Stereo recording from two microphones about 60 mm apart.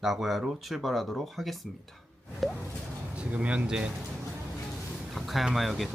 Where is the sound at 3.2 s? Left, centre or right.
Right.